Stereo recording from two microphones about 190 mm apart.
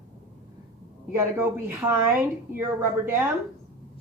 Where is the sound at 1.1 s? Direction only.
10° right (ahead or behind).